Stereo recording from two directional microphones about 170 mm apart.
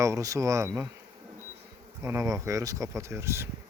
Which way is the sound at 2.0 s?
15° right (ahead or behind).